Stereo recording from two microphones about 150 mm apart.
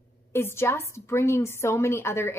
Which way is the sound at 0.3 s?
15° left (ahead or behind).